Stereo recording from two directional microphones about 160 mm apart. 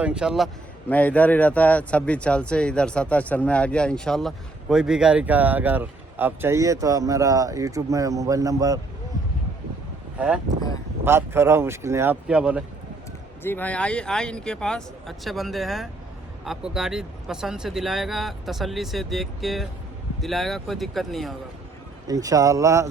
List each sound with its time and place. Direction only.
0.0 s speech: 5° right (ahead or behind)
0.9 s speech: 10° left (ahead or behind); by 8.8 s 20° right (ahead or behind)
10.2 s speech: 5° right (ahead or behind)
13.4 s speech: 10° left (ahead or behind)
22.0 s speech: 20° right (ahead or behind)